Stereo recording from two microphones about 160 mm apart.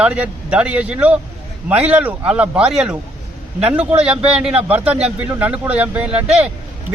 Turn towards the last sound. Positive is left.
turn(degrees=-10)  # may be behind; listen again after turning